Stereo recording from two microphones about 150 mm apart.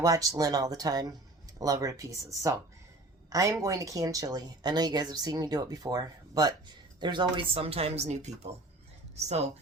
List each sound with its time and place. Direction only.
0.0 s a woman's voice: 25° right (ahead or behind); by 8.4 s 50° right (ahead or behind)